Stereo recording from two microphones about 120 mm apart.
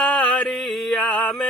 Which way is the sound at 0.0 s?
10° left (ahead or behind).